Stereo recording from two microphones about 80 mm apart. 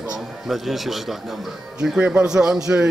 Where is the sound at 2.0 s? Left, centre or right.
Centre.